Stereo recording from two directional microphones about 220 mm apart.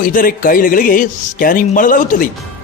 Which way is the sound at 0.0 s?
40° left (ahead or behind).